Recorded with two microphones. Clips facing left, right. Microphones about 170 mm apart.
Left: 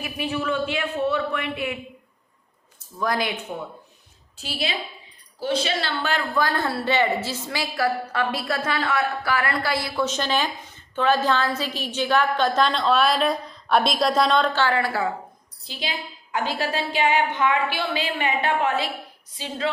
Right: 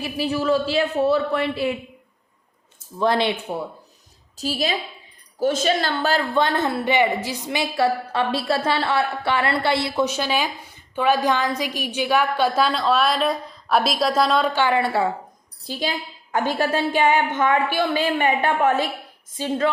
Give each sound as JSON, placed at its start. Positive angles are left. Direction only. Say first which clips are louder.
{"t": 0.0, "sound": "speech", "louder": "right 4 dB", "side_deg": -35}
{"t": 3.0, "sound": "a woman's voice", "louder": "right 5 dB", "side_deg": -30}
{"t": 6.4, "sound": "a woman's voice", "louder": "right 3 dB", "side_deg": -20}
{"t": 10.1, "sound": "a woman's voice", "louder": "right 1 dB", "side_deg": -10}
{"t": 14.8, "sound": "a woman's voice", "louder": "right 3 dB", "side_deg": -25}
{"t": 15.6, "sound": "a woman's voice", "louder": "right 5 dB", "side_deg": -45}